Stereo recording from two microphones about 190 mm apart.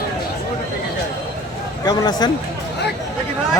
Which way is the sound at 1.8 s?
20° left (ahead or behind).